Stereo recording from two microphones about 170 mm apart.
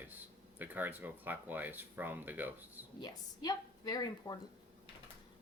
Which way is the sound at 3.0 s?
20° left (ahead or behind).